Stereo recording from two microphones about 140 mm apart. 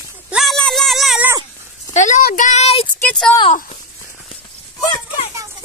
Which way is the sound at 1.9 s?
60° left (ahead or behind).